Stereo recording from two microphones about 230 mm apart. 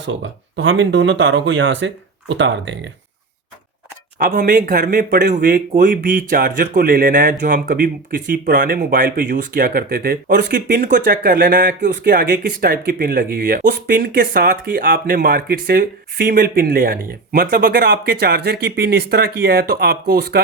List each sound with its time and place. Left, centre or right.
0.0 s speech: right
4.2 s speech: right